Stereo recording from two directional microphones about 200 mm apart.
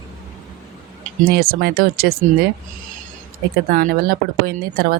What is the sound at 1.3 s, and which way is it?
Speech, 50° right (ahead or behind).